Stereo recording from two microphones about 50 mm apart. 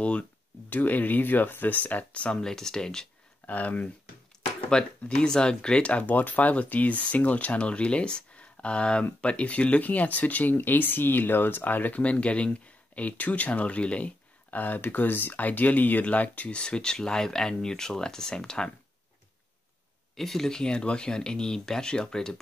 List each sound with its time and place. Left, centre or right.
0.7 s speech: left
2.3 s speech: centre
3.4 s speech: left
4.6 s speech: centre; by 12.0 s left
12.0 s speech: left
16.4 s speech: centre
20.2 s speech: centre